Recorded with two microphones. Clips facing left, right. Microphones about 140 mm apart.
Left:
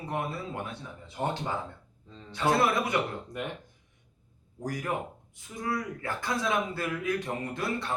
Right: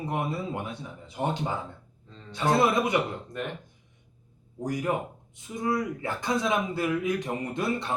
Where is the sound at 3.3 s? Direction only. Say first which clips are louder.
Right 2 dB; 15° left (ahead or behind).